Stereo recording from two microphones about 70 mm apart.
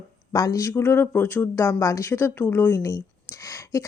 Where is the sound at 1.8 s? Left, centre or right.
Left.